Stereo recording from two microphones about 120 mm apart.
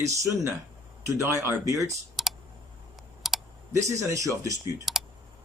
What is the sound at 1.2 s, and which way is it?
Speech, 25° right (ahead or behind).